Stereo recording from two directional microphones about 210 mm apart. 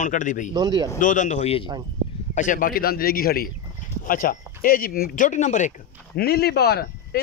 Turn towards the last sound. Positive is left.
turn(degrees=50)  # may be behind; listen again after turning